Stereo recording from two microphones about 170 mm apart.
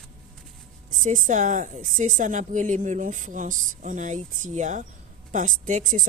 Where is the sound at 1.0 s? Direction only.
50° right (ahead or behind).